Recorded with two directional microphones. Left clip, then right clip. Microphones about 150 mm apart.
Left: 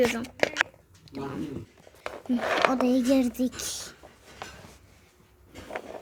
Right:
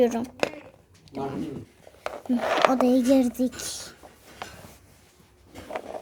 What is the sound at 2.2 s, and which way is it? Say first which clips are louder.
Speech: right 2 dB; centre (ahead or behind).